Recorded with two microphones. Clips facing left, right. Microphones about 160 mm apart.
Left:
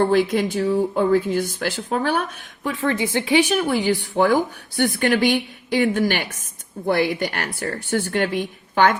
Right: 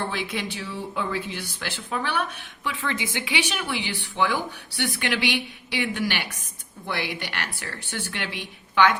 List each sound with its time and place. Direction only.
0.0 s a woman's voice: 50° left (ahead or behind)